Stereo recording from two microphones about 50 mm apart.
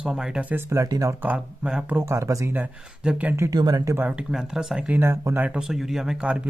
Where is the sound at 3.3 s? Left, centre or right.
Right.